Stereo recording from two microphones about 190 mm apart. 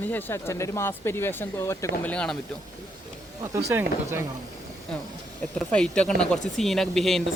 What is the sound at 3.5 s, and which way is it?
Speech, 15° right (ahead or behind).